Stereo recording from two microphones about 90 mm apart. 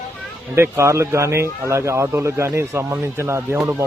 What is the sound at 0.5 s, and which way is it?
A man's voice, 30° right (ahead or behind).